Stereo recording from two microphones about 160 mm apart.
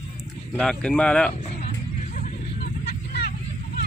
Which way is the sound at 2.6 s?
85° left.